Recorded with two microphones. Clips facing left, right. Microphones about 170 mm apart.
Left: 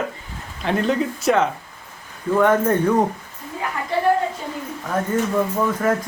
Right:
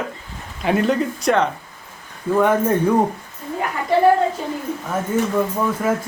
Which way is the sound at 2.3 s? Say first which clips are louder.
Even; 10° right (ahead or behind).